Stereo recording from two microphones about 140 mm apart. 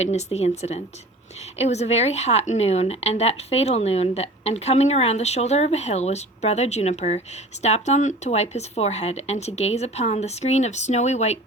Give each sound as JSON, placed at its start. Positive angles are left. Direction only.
{"t": 0.0, "sound": "speech", "side_deg": 50}